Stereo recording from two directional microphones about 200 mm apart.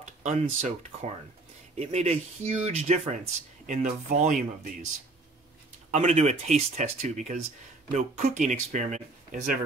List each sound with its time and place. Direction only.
0.0 s a sound: 35° right (ahead or behind)
0.6 s speech: 40° right (ahead or behind)
5.9 s speech: 35° right (ahead or behind)